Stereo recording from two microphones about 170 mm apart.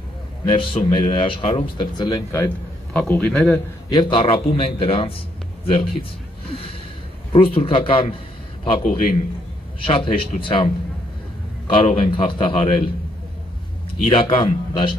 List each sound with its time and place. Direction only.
0.5 s speech: 30° left (ahead or behind); by 3.6 s 10° left (ahead or behind)
3.9 s a man's voice: 25° left (ahead or behind)
7.3 s a man's voice: 35° left (ahead or behind)
14.0 s speech: 30° left (ahead or behind)